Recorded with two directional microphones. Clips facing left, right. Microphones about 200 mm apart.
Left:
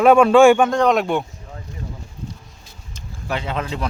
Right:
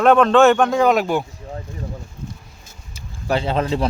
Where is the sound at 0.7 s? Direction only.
5° right (ahead or behind).